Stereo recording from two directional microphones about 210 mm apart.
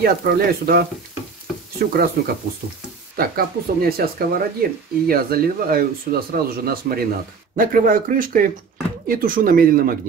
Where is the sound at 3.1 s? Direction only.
45° right (ahead or behind).